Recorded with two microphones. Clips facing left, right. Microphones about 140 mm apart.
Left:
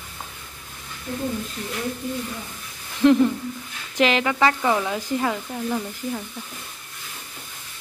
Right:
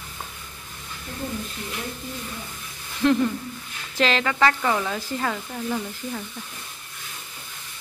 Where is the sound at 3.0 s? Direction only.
15° left (ahead or behind).